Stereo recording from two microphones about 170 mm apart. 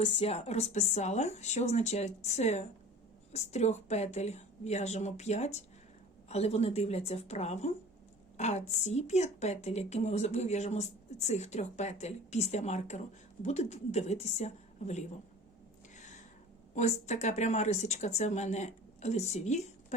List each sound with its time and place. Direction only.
0.2 s a woman's voice: 40° left (ahead or behind)
16.0 s gasp: 45° left (ahead or behind)
16.7 s a woman's voice: 45° left (ahead or behind)